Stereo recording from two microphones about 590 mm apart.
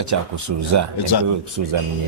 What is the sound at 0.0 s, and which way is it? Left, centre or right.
Speech, right.